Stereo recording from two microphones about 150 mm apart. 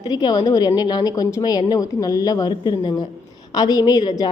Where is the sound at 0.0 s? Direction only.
25° left (ahead or behind).